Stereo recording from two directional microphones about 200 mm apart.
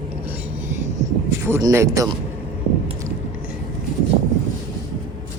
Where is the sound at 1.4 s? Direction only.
15° right (ahead or behind).